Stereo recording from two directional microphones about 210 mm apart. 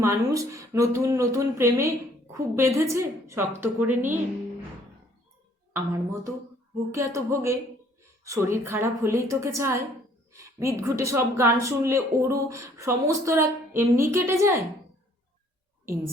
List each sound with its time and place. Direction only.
0.0 s speech: 15° right (ahead or behind)
5.7 s speech: 15° right (ahead or behind)